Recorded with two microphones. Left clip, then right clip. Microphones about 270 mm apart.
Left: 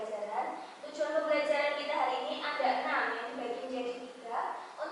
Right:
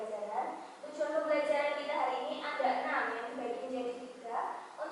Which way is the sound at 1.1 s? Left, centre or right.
Centre.